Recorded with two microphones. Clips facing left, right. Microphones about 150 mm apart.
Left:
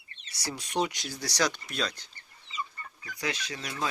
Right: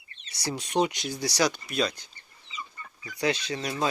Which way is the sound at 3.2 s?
30° right (ahead or behind).